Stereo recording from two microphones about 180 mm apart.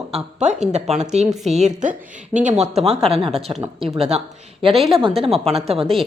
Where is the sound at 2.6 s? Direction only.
35° right (ahead or behind).